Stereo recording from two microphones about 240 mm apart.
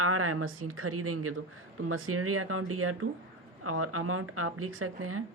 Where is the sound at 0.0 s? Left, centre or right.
Right.